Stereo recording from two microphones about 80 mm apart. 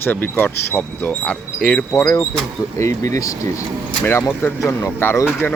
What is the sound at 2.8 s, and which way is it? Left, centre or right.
Speech, left.